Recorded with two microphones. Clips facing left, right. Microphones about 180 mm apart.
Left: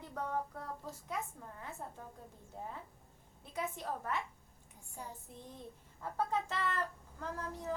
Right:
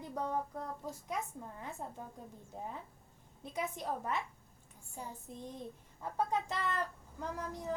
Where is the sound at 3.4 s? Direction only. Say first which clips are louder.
Right 2 dB; 15° right (ahead or behind).